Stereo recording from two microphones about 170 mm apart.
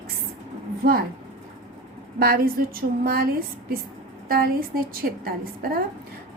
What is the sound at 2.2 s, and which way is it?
Speech, 60° right (ahead or behind).